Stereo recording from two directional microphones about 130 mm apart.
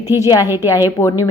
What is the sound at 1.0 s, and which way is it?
Speech, 25° left (ahead or behind).